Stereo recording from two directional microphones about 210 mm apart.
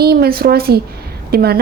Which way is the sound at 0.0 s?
50° right (ahead or behind).